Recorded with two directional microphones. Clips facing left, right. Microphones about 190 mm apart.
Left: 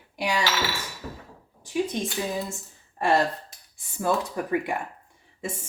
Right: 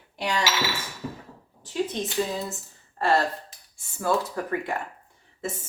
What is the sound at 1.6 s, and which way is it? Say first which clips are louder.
Speech: left 1 dB; 10° left (ahead or behind).